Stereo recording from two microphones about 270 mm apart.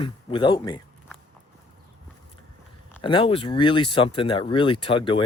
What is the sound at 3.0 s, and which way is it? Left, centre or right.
Speech, centre.